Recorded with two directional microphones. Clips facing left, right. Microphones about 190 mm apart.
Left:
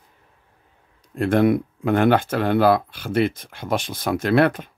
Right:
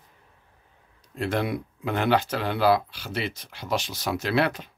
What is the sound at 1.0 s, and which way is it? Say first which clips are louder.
Speech: left 9 dB; 50° left (ahead or behind).